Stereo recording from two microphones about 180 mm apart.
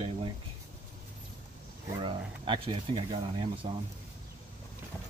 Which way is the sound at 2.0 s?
30° right (ahead or behind).